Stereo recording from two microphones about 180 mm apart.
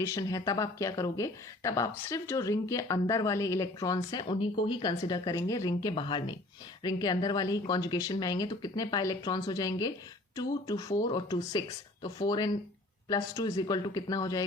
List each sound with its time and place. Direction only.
0.0 s speech: 20° left (ahead or behind)